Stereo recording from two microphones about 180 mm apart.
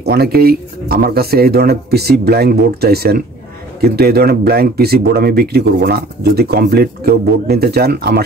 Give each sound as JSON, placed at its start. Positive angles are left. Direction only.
{"t": 0.0, "sound": "speech", "side_deg": -60}